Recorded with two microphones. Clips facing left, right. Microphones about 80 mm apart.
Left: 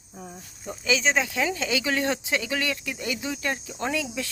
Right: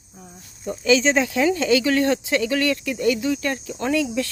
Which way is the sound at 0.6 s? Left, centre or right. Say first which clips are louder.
Right 7 dB; centre.